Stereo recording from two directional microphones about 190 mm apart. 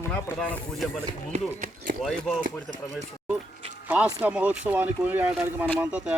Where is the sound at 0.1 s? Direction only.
5° left (ahead or behind).